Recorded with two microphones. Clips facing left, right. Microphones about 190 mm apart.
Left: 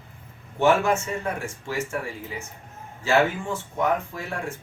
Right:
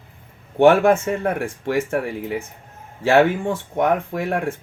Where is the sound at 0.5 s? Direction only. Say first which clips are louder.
Right 7 dB; 60° right (ahead or behind).